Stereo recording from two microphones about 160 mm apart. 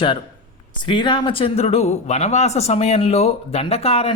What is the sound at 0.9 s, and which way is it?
A man's voice, 30° left (ahead or behind).